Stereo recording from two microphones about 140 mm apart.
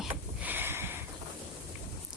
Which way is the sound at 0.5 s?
15° right (ahead or behind).